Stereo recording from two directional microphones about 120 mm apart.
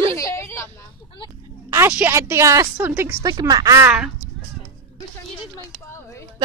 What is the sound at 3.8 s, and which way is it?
Speech, 10° right (ahead or behind).